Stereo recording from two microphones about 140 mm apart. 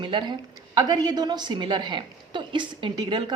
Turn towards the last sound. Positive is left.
turn(degrees=-35)  # may be behind; listen again after turning